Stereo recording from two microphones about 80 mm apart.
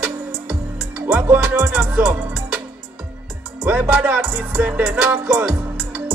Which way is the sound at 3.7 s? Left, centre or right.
Centre.